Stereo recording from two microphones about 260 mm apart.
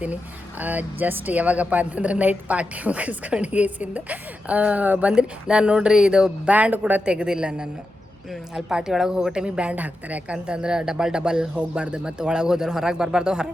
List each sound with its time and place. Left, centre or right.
0.6 s a woman's voice: centre